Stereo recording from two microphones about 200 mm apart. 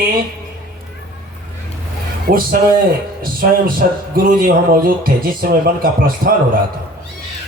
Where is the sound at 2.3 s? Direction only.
45° right (ahead or behind).